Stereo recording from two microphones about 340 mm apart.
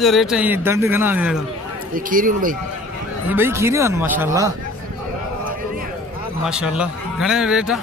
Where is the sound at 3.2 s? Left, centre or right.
Centre.